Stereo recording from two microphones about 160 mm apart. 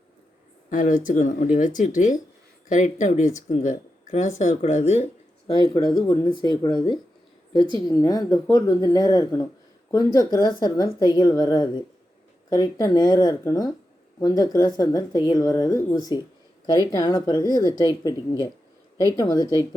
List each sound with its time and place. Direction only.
0.7 s speech: 55° left (ahead or behind)
5.5 s speech: 25° left (ahead or behind)
19.1 s speech: 25° left (ahead or behind)